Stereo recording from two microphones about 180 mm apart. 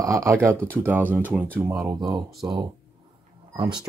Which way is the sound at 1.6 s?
15° right (ahead or behind).